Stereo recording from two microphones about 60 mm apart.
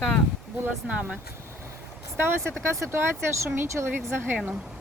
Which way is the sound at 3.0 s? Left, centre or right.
Right.